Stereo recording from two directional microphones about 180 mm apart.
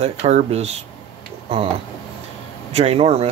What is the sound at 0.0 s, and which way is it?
Speech, 40° right (ahead or behind).